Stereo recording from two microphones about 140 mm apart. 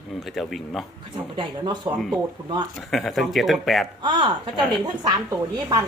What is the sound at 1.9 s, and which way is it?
Speech, 20° right (ahead or behind).